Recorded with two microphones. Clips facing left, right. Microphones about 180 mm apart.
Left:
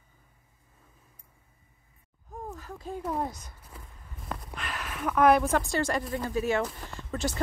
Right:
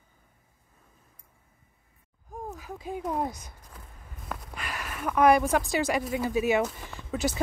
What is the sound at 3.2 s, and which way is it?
Speech, 15° right (ahead or behind).